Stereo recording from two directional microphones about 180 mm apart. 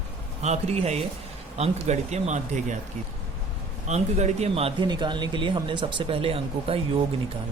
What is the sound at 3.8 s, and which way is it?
Speech, 40° right (ahead or behind).